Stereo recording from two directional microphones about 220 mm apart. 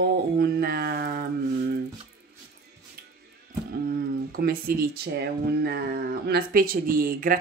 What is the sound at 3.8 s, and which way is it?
Speech, 40° right (ahead or behind).